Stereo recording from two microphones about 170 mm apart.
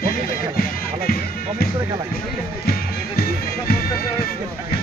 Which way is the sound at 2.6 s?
65° left (ahead or behind).